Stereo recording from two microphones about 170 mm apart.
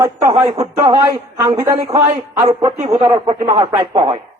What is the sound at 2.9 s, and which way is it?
Speech, 30° right (ahead or behind).